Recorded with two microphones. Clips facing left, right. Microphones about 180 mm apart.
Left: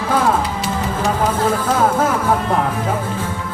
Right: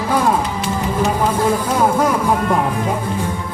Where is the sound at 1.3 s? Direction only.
15° right (ahead or behind).